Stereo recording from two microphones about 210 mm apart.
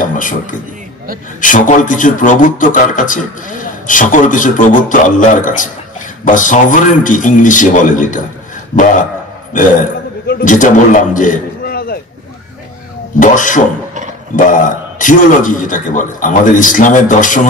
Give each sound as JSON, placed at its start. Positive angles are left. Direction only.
{"t": 0.0, "sound": "a sound", "side_deg": 40}
{"t": 1.4, "sound": "speech", "side_deg": 40}
{"t": 9.5, "sound": "a man's voice", "side_deg": 40}
{"t": 13.2, "sound": "speech", "side_deg": 40}